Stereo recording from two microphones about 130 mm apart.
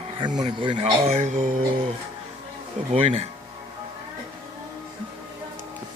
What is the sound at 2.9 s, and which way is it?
Speech, 50° right (ahead or behind).